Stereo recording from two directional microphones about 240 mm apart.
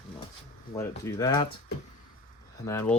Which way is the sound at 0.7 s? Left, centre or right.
Centre.